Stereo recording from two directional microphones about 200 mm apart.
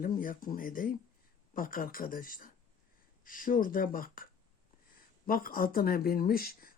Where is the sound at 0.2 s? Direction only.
45° left (ahead or behind).